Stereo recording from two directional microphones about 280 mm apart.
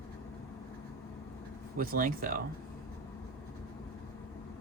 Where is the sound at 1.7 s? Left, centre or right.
Right.